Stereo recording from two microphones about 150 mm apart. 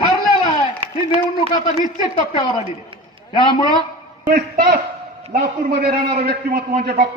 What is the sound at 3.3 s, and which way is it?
Speech, 30° left (ahead or behind).